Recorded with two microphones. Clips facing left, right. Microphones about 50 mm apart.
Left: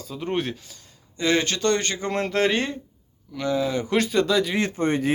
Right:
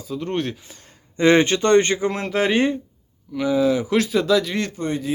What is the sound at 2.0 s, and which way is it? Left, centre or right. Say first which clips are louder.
Speech: right 1 dB; centre.